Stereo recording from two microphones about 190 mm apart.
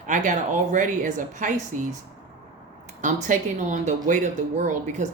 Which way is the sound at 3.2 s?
40° right (ahead or behind).